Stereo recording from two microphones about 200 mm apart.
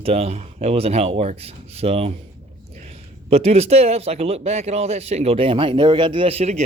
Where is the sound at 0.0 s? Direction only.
30° right (ahead or behind).